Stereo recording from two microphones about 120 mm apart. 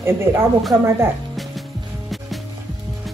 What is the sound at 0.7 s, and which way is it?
Speech, 20° right (ahead or behind).